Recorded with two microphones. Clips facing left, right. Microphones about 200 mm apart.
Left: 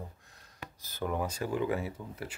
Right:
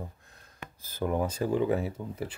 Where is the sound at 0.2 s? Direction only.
55° right (ahead or behind).